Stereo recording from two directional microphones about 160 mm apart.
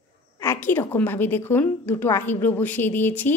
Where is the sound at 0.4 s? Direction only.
15° left (ahead or behind).